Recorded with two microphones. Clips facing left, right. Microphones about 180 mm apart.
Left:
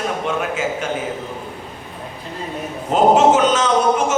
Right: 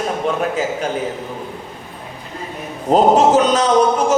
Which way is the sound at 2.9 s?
35° right (ahead or behind).